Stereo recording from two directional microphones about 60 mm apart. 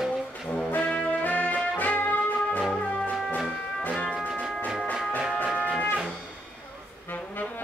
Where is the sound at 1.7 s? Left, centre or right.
Left.